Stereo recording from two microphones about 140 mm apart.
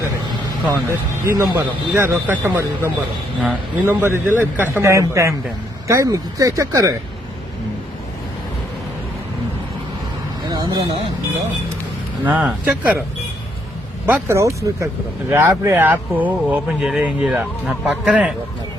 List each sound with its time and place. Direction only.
0.7 s speech: 20° right (ahead or behind)
10.5 s a sound: 30° right (ahead or behind)
12.2 s speech: 10° right (ahead or behind)
14.1 s speech: 20° right (ahead or behind)